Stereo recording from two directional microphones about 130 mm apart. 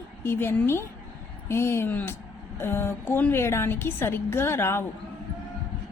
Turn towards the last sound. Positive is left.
turn(degrees=20)  # may be behind; listen again after turning